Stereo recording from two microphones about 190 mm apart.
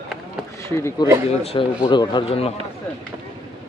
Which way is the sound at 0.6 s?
15° left (ahead or behind).